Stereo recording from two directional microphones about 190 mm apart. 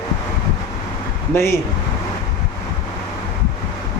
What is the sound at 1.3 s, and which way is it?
Speech, 15° left (ahead or behind).